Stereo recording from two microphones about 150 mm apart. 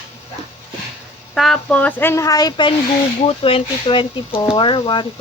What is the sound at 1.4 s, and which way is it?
Speech, 5° left (ahead or behind).